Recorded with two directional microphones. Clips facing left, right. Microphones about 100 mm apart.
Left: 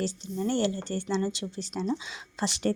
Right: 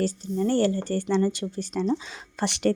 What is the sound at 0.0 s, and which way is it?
A woman's voice, 45° right (ahead or behind).